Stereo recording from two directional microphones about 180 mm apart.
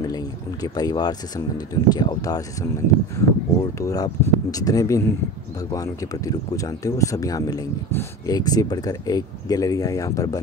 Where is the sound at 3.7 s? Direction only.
20° left (ahead or behind).